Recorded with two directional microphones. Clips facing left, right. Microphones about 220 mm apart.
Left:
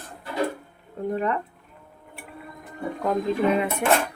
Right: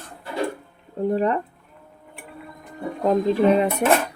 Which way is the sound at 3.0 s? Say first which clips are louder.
Right 5 dB; 35° right (ahead or behind).